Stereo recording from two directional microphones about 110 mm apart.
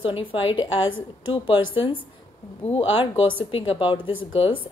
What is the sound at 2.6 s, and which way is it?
Speech, 65° left (ahead or behind).